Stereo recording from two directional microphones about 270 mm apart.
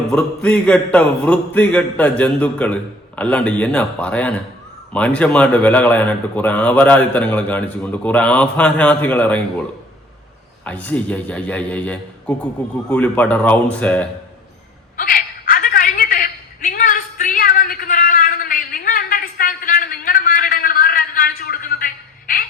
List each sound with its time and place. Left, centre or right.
0.1 s a man's voice: centre
10.7 s a man's voice: centre
14.9 s a sound: left